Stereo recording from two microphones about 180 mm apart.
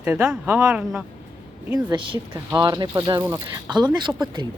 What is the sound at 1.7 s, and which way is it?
Speech, 25° right (ahead or behind).